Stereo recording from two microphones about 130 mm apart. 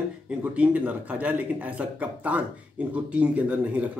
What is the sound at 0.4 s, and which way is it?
Speech, 10° right (ahead or behind).